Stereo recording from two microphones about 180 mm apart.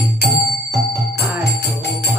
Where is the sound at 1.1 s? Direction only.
65° left (ahead or behind).